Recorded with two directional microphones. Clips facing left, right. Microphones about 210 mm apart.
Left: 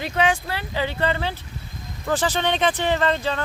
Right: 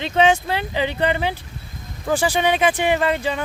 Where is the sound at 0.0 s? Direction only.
25° right (ahead or behind).